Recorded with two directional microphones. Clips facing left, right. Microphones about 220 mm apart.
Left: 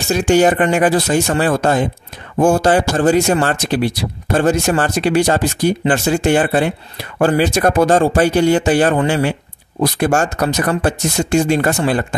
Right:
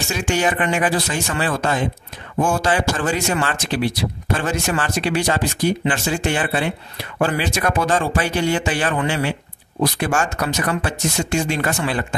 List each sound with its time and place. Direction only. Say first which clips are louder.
0.1 s speech: left 9 dB; 40° left (ahead or behind)